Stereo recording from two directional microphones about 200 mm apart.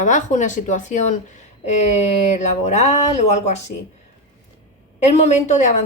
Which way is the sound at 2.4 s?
35° left (ahead or behind).